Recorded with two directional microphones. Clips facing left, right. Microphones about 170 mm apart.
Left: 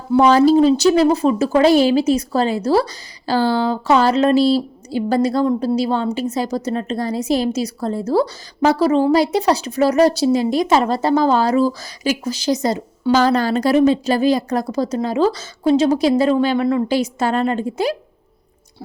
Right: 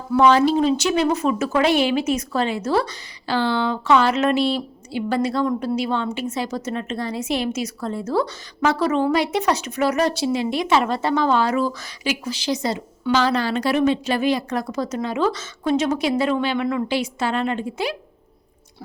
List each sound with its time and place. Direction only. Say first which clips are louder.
0.1 s a woman's voice: left 4 dB; 35° left (ahead or behind)